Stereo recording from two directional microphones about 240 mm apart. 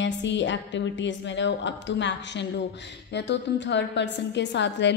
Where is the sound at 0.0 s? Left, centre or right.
Left.